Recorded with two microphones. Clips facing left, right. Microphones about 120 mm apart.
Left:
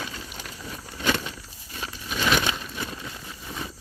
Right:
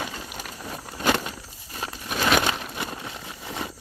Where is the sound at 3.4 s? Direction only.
75° right (ahead or behind).